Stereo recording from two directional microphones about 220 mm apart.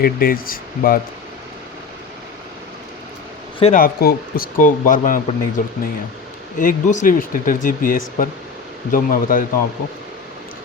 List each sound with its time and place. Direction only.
0.0 s speech: 40° left (ahead or behind)
3.6 s speech: 35° left (ahead or behind)